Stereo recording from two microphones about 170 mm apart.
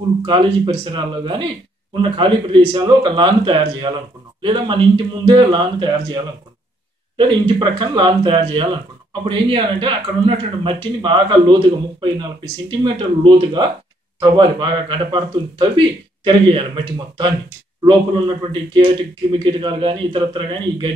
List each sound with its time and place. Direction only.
0.2 s speech: 30° right (ahead or behind)